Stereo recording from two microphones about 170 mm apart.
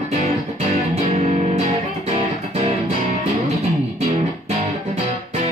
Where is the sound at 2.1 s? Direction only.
40° right (ahead or behind).